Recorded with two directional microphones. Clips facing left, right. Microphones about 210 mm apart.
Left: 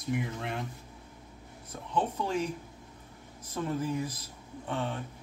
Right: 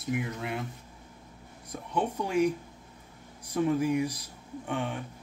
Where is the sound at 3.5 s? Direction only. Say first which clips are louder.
Right 6 dB; 15° right (ahead or behind).